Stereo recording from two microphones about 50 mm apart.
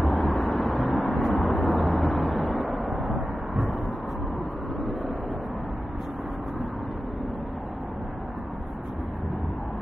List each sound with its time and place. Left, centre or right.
0.0 s vehicle: centre